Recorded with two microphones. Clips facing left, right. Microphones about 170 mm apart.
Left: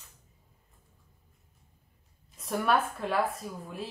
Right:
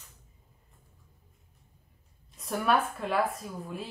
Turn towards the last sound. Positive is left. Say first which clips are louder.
# right 1 dB
turn(degrees=0)  # may be behind; listen again after turning